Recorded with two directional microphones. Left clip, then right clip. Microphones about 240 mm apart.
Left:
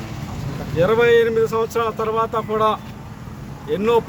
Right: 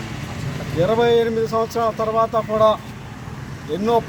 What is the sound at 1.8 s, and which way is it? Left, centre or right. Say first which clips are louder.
Speech: right 2 dB; centre.